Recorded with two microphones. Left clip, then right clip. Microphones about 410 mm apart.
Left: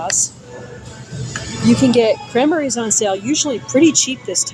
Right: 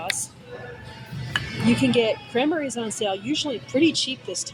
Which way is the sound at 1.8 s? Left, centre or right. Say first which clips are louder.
Left 8 dB; right.